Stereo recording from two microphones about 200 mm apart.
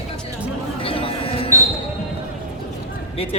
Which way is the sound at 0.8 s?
25° left (ahead or behind).